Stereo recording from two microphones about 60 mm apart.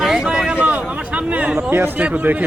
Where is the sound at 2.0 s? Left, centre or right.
Right.